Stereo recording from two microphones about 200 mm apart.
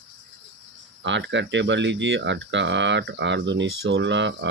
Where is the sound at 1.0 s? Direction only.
65° right (ahead or behind).